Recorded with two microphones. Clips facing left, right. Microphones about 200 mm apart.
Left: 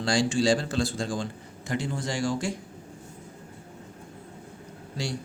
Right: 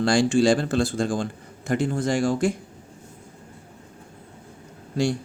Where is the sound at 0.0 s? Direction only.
55° right (ahead or behind).